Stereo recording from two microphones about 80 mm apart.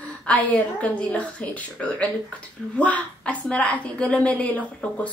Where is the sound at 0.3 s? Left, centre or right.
Centre.